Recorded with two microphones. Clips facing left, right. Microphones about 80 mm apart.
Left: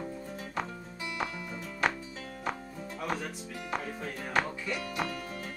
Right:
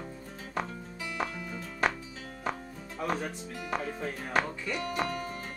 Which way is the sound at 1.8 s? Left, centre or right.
Centre.